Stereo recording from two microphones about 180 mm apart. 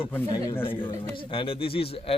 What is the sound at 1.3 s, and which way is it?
Speech, 30° left (ahead or behind).